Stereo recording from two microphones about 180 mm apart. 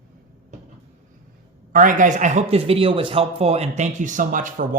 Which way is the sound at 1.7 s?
45° right (ahead or behind).